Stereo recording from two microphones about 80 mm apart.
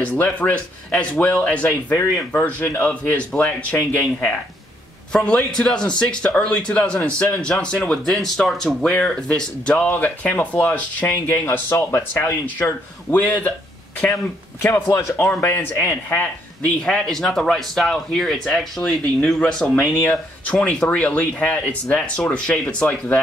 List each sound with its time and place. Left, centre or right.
0.0 s a man's voice: centre
9.8 s speech: left
16.6 s a man's voice: centre
20.0 s a man's voice: left